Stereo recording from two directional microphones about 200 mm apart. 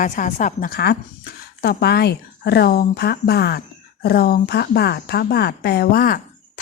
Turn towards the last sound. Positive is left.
turn(degrees=45)  # may be behind; listen again after turning